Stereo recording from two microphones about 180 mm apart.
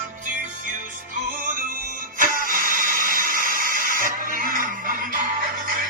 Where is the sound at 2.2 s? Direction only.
50° right (ahead or behind).